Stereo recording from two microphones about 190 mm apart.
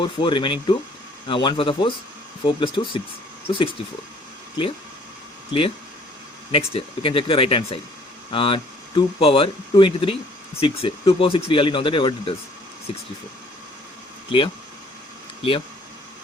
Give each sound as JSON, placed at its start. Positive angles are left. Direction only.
{"t": 0.0, "sound": "speech", "side_deg": 25}
{"t": 5.5, "sound": "speech", "side_deg": 25}
{"t": 14.3, "sound": "speech", "side_deg": 25}